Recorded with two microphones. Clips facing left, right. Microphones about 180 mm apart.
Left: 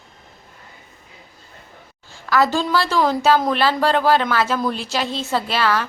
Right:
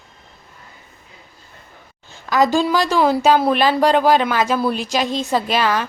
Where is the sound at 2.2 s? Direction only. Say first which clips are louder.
Right 2 dB; 15° right (ahead or behind).